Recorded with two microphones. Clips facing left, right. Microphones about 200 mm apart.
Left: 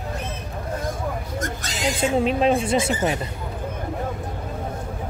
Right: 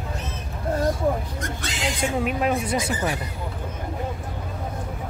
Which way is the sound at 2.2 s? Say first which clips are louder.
Left 4 dB; 25° left (ahead or behind).